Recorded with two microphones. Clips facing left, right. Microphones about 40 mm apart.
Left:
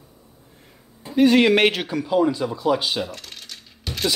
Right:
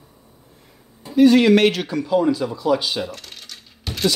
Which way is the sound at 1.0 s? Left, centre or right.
Centre.